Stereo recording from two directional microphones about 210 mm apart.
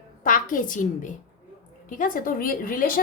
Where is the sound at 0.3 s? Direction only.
40° left (ahead or behind).